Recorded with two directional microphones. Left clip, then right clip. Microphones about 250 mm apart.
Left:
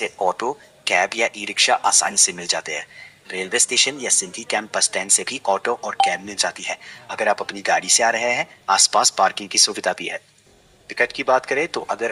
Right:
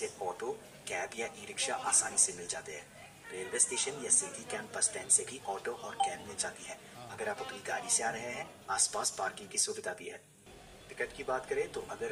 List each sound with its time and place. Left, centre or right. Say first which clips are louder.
0.9 s speech: left 19 dB; right